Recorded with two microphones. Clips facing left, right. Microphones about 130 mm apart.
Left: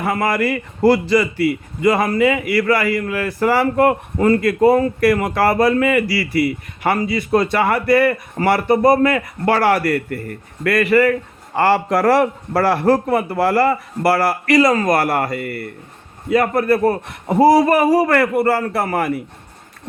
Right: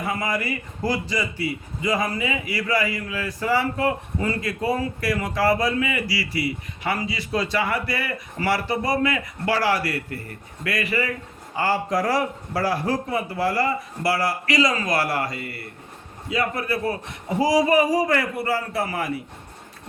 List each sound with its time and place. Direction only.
0.0 s a man's voice: 70° left (ahead or behind)